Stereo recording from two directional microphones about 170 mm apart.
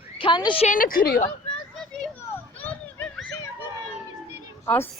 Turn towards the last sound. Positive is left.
turn(degrees=15)  # may be behind; listen again after turning